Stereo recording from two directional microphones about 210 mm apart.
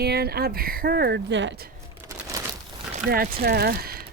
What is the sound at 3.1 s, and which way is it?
Speech, 45° right (ahead or behind).